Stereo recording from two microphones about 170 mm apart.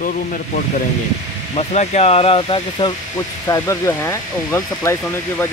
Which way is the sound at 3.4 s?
15° left (ahead or behind).